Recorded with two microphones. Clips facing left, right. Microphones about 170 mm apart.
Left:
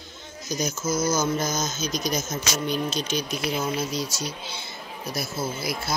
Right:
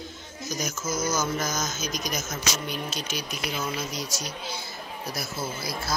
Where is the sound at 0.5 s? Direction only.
30° left (ahead or behind).